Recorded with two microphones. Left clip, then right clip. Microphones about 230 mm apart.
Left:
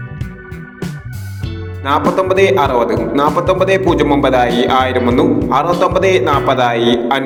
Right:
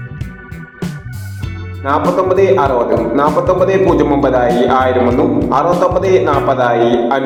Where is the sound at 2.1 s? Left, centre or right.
Left.